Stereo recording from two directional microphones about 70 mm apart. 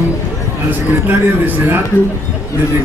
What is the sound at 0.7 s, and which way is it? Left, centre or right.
Speech, right.